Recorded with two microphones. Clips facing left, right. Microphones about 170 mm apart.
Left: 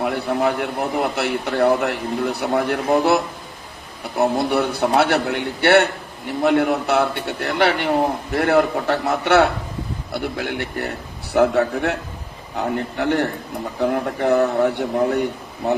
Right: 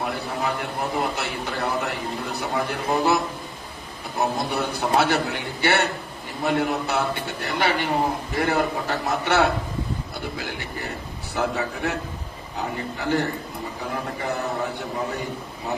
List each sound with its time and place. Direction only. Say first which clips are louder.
0.0 s a man's voice: left 7 dB; 65° left (ahead or behind)
4.2 s a man's voice: left 6 dB; 65° left (ahead or behind)